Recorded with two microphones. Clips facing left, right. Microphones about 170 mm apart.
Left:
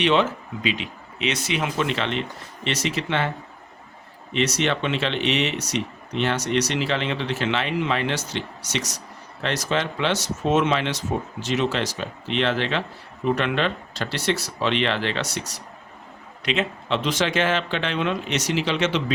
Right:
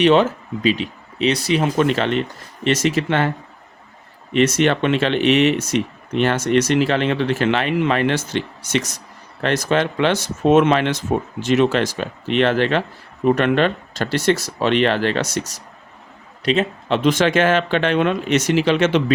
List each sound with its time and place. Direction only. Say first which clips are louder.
0.0 s speech: right 6 dB; 45° right (ahead or behind)
4.4 s speech: right 7 dB; 50° right (ahead or behind)